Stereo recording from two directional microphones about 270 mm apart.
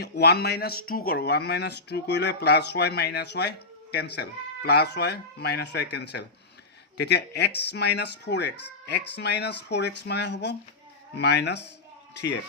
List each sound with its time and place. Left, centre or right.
0.0 s speech: left